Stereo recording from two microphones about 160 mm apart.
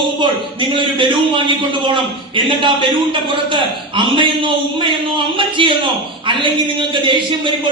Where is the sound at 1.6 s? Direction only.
30° right (ahead or behind).